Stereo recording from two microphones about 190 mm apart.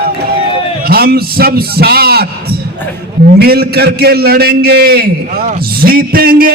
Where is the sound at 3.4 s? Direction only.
55° right (ahead or behind).